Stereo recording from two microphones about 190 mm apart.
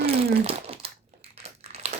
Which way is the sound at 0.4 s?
30° right (ahead or behind).